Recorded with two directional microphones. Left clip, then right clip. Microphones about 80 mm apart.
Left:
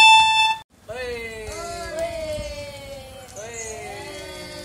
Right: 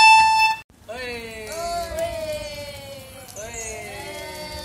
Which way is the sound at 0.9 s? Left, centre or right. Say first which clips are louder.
Left 2 dB; left.